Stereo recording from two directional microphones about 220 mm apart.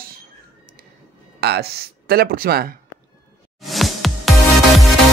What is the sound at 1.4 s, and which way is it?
Speech, 45° right (ahead or behind).